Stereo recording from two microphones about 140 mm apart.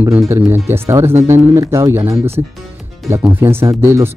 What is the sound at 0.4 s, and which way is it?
Speech, 15° right (ahead or behind).